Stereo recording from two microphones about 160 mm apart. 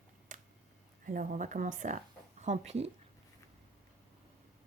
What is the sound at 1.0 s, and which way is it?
Speech, 55° right (ahead or behind).